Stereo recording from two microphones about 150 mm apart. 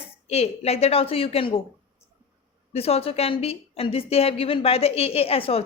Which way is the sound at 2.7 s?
40° left (ahead or behind).